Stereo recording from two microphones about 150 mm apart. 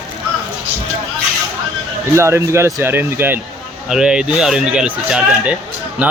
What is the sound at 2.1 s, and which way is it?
Speech, 20° right (ahead or behind).